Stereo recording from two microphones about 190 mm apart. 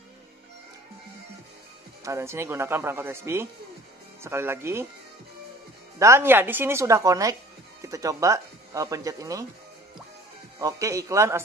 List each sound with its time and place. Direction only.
2.0 s speech: 15° right (ahead or behind)
5.9 s speech: 15° right (ahead or behind)
10.6 s speech: 15° right (ahead or behind)